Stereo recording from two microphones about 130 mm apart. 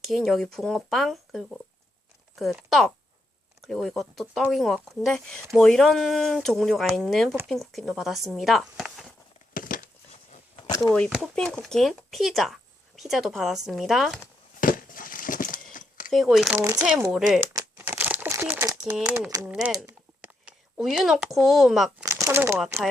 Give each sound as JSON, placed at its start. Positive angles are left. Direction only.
{"t": 0.0, "sound": "speech", "side_deg": 0}
{"t": 9.6, "sound": "a sound", "side_deg": 90}
{"t": 11.1, "sound": "speech", "side_deg": 5}
{"t": 14.6, "sound": "a sound", "side_deg": 90}
{"t": 16.0, "sound": "speech", "side_deg": -5}
{"t": 16.6, "sound": "speech", "side_deg": -25}
{"t": 16.8, "sound": "speech", "side_deg": -10}
{"t": 17.5, "sound": "crumpling", "side_deg": -25}
{"t": 17.8, "sound": "crumpling", "side_deg": -15}
{"t": 19.0, "sound": "speech", "side_deg": -10}
{"t": 22.0, "sound": "speech", "side_deg": -20}